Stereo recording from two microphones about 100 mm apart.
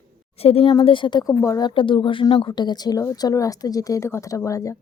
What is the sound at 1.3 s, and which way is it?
Speech, 35° left (ahead or behind).